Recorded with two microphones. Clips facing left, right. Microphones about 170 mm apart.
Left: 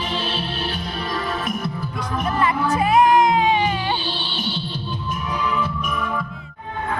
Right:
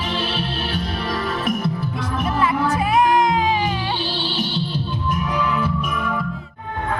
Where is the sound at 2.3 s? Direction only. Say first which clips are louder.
Even; centre (ahead or behind).